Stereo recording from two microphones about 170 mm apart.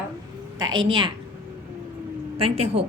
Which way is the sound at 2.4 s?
35° right (ahead or behind).